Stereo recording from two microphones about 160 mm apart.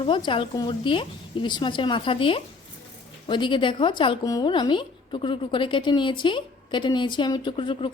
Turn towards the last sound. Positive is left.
turn(degrees=35)  # may be behind; listen again after turning